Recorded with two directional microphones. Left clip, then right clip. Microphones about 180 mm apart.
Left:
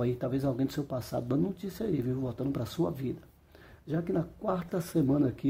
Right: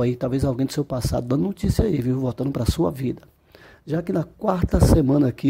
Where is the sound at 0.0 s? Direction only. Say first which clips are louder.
Right 8 dB; 35° right (ahead or behind).